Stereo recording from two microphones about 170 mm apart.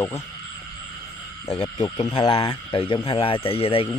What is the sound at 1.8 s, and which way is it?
Speech, 25° left (ahead or behind).